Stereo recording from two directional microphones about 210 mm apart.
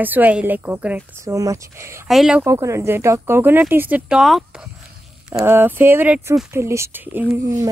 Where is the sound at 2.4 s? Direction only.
15° right (ahead or behind).